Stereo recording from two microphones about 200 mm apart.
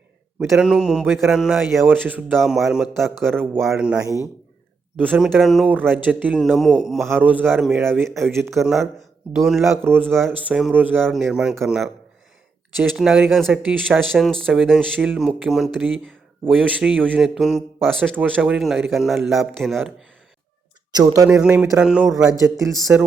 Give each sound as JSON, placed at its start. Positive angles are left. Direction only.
{"t": 0.3, "sound": "a man's voice", "side_deg": -5}
{"t": 8.6, "sound": "speech", "side_deg": 0}
{"t": 9.8, "sound": "speech", "side_deg": -10}
{"t": 13.0, "sound": "speech", "side_deg": 0}
{"t": 20.9, "sound": "a man's voice", "side_deg": -15}
{"t": 22.4, "sound": "a man's voice", "side_deg": -15}